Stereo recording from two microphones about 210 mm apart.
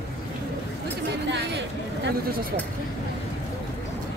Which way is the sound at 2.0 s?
45° right (ahead or behind).